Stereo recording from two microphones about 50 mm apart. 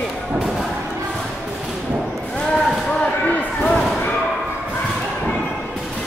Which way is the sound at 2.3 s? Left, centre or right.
Centre.